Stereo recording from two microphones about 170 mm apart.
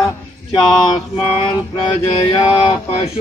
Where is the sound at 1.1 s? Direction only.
30° left (ahead or behind).